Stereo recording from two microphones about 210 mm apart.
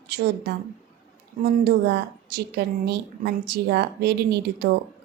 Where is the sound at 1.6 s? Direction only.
50° right (ahead or behind).